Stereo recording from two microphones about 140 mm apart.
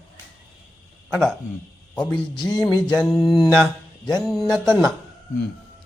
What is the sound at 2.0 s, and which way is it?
Speech, 5° left (ahead or behind).